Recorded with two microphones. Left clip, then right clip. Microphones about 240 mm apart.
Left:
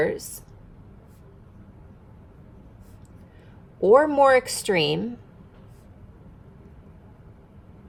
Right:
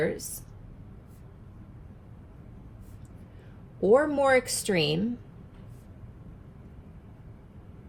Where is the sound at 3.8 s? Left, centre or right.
Left.